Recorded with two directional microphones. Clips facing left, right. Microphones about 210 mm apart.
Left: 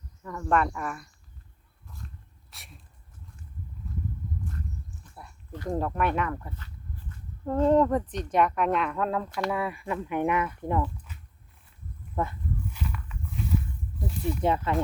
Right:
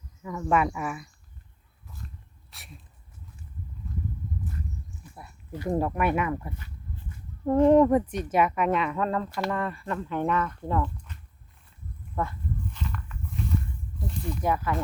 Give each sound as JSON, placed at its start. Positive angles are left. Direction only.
{"t": 0.2, "sound": "speech", "side_deg": -5}
{"t": 2.5, "sound": "a sound", "side_deg": 0}
{"t": 5.0, "sound": "speech", "side_deg": -10}
{"t": 9.5, "sound": "speech", "side_deg": 10}
{"t": 10.8, "sound": "a sound", "side_deg": 5}
{"t": 12.2, "sound": "speech", "side_deg": 20}
{"t": 12.7, "sound": "a sound", "side_deg": 5}
{"t": 14.1, "sound": "snake", "side_deg": 5}
{"t": 14.4, "sound": "speech", "side_deg": 25}